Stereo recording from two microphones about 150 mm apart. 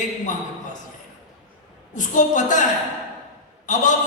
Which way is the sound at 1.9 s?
55° left (ahead or behind).